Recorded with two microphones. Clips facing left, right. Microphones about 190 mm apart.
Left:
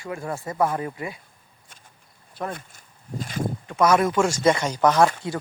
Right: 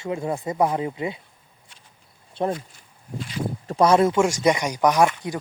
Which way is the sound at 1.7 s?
45° left (ahead or behind).